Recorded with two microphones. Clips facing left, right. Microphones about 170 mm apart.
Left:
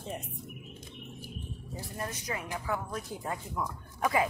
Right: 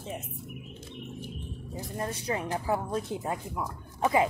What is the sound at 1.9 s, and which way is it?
Speech, 30° right (ahead or behind).